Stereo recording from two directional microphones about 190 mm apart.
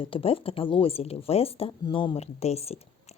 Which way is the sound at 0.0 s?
30° left (ahead or behind).